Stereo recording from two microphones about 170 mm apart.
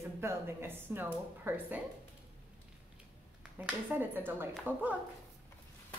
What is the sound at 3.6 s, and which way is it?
Speech, 10° right (ahead or behind).